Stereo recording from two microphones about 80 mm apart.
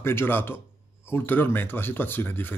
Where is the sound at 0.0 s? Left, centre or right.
Left.